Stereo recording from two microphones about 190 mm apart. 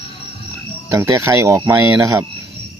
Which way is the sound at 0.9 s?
15° right (ahead or behind).